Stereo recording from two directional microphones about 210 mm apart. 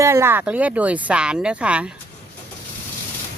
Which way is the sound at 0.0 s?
10° right (ahead or behind).